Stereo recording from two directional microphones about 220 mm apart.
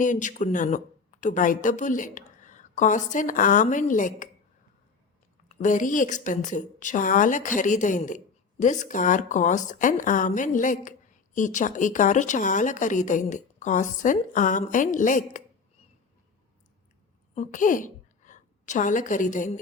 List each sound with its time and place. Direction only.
0.0 s speech: 35° left (ahead or behind)
5.5 s speech: 35° left (ahead or behind)
17.3 s a woman's voice: 35° left (ahead or behind)